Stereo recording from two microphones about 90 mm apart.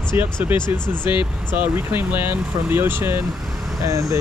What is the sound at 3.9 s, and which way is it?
Speech, 35° right (ahead or behind).